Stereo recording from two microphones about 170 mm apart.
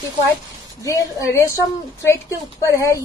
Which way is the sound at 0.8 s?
20° left (ahead or behind).